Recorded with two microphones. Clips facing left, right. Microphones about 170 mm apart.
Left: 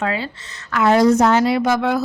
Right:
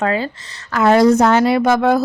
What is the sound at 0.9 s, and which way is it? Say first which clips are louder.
A woman's voice: right 2 dB; 65° right (ahead or behind).